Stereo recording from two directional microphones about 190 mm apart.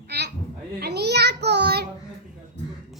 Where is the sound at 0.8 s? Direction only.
60° right (ahead or behind).